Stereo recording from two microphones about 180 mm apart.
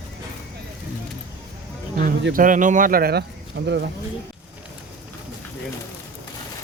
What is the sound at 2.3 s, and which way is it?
Speech, 45° right (ahead or behind).